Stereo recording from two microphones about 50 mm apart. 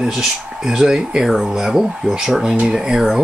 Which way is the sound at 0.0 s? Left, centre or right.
Centre.